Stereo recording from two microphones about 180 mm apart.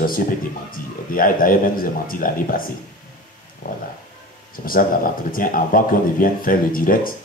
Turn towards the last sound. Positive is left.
turn(degrees=50)  # may be behind; listen again after turning